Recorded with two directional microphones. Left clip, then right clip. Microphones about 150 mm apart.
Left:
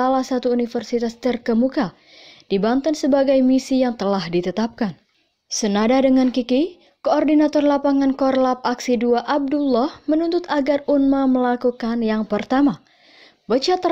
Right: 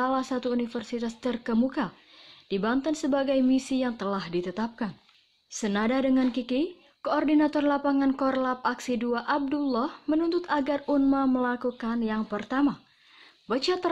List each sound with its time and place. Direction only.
0.0 s a woman's voice: 20° left (ahead or behind)
11.3 s a woman's voice: 30° left (ahead or behind)
13.5 s a woman's voice: 20° left (ahead or behind)